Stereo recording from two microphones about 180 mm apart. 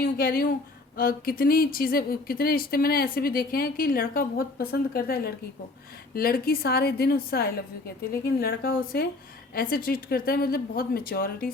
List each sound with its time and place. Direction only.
0.0 s speech: 55° left (ahead or behind)